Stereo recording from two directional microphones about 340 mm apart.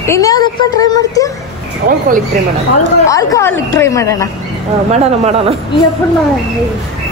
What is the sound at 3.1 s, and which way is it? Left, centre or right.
Speech, centre.